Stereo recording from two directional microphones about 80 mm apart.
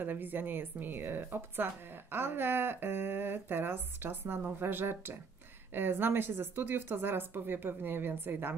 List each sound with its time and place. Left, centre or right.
0.0 s a woman's voice: right